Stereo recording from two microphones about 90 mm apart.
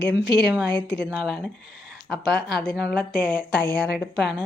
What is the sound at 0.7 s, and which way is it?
Speech, 60° right (ahead or behind).